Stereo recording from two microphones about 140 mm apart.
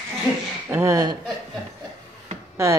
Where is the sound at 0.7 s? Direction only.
20° right (ahead or behind).